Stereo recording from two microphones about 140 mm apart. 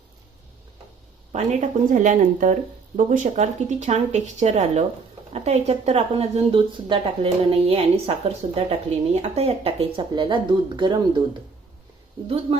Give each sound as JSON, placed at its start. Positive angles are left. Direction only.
{"t": 1.3, "sound": "a woman's voice", "side_deg": -55}
{"t": 12.5, "sound": "speech", "side_deg": -40}